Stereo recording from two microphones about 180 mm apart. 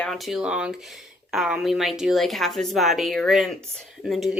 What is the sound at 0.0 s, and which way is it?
Speech, centre (ahead or behind).